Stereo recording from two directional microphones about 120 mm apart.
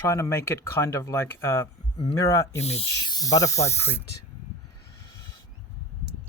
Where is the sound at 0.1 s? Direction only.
25° left (ahead or behind).